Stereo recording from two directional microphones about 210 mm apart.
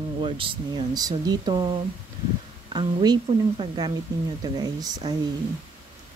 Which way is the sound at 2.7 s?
20° right (ahead or behind).